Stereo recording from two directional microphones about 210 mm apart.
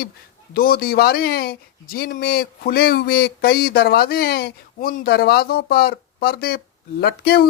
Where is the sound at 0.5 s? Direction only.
45° left (ahead or behind).